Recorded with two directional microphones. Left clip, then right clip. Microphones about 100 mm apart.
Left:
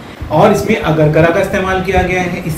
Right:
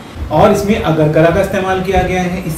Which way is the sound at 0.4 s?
15° right (ahead or behind).